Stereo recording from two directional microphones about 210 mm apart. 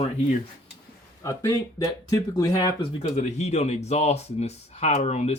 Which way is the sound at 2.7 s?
30° left (ahead or behind).